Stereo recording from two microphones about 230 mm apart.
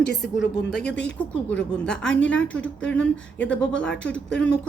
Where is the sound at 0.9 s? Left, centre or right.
Left.